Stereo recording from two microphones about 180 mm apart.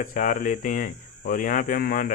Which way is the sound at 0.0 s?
45° left (ahead or behind).